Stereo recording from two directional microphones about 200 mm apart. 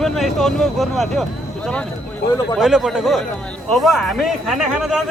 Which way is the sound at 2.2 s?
55° left (ahead or behind).